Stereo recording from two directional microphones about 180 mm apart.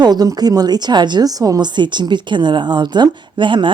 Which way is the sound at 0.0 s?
20° right (ahead or behind).